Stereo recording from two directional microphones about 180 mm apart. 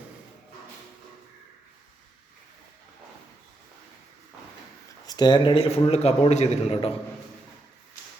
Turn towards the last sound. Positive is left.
turn(degrees=35)  # may be behind; listen again after turning